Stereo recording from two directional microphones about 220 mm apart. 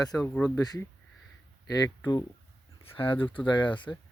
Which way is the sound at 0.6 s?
15° left (ahead or behind).